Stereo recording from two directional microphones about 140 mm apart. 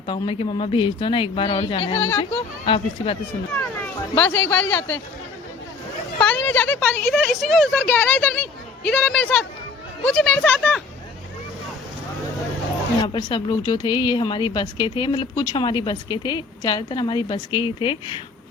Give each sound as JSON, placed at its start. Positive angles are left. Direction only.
{"t": 0.1, "sound": "speech", "side_deg": 40}
{"t": 3.5, "sound": "a sound", "side_deg": 15}
{"t": 4.3, "sound": "speech", "side_deg": 15}
{"t": 6.1, "sound": "speech", "side_deg": 10}
{"t": 13.0, "sound": "speech", "side_deg": 35}